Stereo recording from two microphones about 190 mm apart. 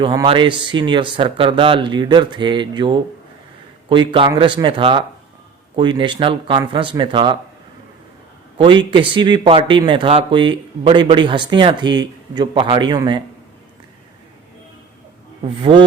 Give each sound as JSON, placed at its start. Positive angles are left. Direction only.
{"t": 0.0, "sound": "a man's voice", "side_deg": -25}
{"t": 8.5, "sound": "a man's voice", "side_deg": -25}
{"t": 15.4, "sound": "a man's voice", "side_deg": -25}